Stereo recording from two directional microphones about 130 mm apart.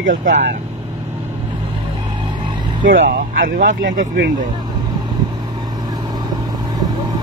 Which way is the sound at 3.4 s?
90° right.